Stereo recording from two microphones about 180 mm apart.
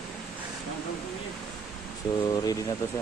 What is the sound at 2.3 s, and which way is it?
Speech, 20° left (ahead or behind).